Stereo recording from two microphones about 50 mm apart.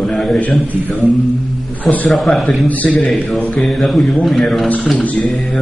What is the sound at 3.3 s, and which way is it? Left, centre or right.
Speech, centre.